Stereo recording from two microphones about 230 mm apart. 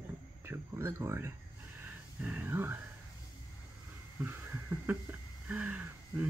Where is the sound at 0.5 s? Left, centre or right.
Centre.